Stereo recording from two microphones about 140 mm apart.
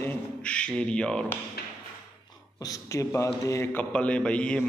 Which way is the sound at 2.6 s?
25° left (ahead or behind).